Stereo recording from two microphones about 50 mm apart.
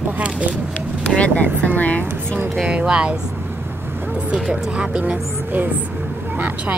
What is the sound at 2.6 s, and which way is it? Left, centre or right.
Speech, right.